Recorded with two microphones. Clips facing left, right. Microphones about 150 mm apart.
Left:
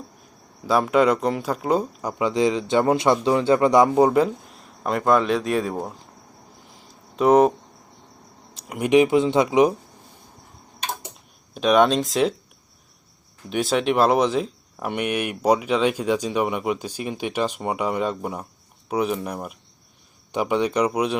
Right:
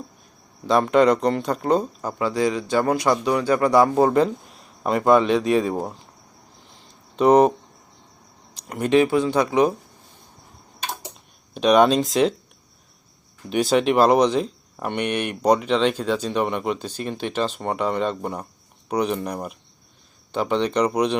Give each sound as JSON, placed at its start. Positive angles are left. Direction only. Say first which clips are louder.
{"t": 0.6, "sound": "speech", "louder": "right 2 dB", "side_deg": 5}
{"t": 7.2, "sound": "speech", "louder": "right 1 dB", "side_deg": 0}
{"t": 8.5, "sound": "speech", "louder": "left 1 dB", "side_deg": 5}
{"t": 11.5, "sound": "speech", "louder": "right 2 dB", "side_deg": 0}
{"t": 13.5, "sound": "speech", "louder": "right 2 dB", "side_deg": 0}